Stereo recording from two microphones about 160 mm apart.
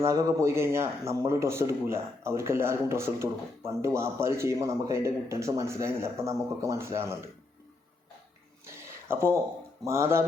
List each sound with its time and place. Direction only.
0.0 s speech: 20° right (ahead or behind)
9.0 s speech: 15° right (ahead or behind)